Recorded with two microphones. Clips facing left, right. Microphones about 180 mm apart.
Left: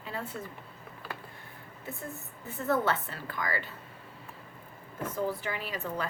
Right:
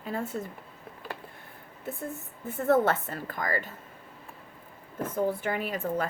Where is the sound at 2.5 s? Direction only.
50° right (ahead or behind).